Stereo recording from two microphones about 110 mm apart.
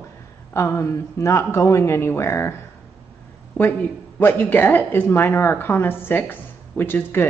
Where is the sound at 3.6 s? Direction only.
15° left (ahead or behind).